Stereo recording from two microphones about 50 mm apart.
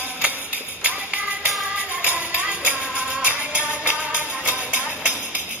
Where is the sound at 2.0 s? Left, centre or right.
Right.